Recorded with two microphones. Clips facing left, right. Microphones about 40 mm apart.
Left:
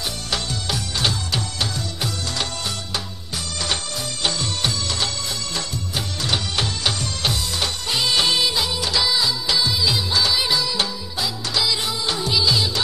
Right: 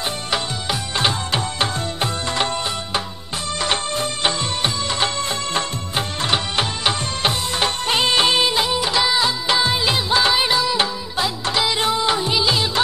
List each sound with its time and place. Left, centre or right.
0.9 s music: right
3.5 s music of bollywood: right
11.1 s music: right
12.1 s music of bollywood: right